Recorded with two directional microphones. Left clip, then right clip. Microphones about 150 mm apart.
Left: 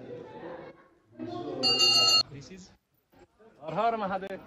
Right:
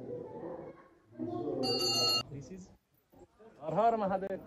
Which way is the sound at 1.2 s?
65° right (ahead or behind).